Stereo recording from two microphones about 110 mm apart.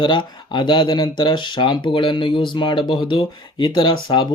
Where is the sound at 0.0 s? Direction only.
45° left (ahead or behind).